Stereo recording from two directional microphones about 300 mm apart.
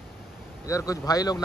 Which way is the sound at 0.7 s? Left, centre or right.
Centre.